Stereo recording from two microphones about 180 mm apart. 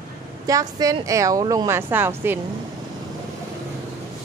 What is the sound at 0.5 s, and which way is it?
A woman's voice, 20° right (ahead or behind).